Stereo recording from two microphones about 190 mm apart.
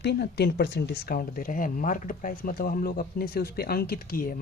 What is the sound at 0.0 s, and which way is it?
Speech, 60° left (ahead or behind).